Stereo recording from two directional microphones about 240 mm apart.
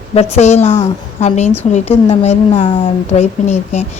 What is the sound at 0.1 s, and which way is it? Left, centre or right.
A woman's voice, left.